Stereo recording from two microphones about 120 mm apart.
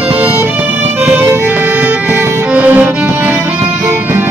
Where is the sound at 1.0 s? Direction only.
15° right (ahead or behind).